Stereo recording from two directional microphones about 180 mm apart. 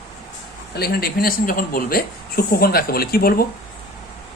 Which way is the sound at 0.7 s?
60° left (ahead or behind).